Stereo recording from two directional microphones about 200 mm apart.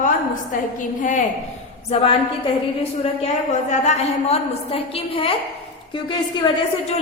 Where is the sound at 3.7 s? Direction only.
30° left (ahead or behind).